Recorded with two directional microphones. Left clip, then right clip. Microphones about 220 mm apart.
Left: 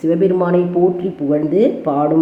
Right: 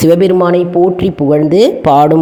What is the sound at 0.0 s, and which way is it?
A woman's voice, 45° right (ahead or behind).